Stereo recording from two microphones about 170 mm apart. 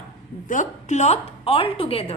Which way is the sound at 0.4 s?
50° left (ahead or behind).